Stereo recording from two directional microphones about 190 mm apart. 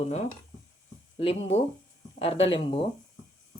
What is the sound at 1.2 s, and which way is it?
Speech, 30° left (ahead or behind).